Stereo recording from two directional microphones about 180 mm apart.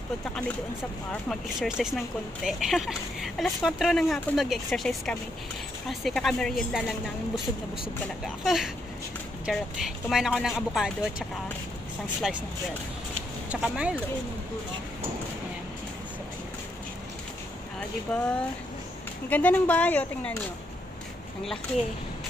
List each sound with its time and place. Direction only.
1.3 s speech: 5° right (ahead or behind)
8.5 s speech: centre (ahead or behind)
13.5 s speech: 5° right (ahead or behind)
18.1 s speech: 5° left (ahead or behind)